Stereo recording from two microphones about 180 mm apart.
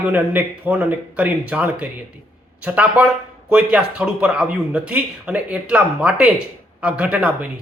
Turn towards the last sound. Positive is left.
turn(degrees=-5)  # may be behind; listen again after turning